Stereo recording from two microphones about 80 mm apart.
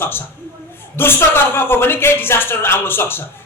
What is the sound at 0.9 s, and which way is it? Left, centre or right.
Speech, left.